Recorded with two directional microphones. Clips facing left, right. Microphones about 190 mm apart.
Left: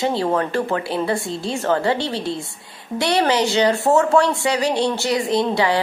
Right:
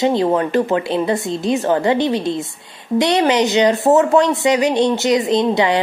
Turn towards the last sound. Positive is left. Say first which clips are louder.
# right 3 dB
turn(degrees=-20)  # may be behind; listen again after turning